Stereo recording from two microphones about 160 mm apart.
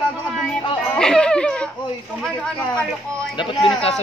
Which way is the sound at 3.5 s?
30° left (ahead or behind).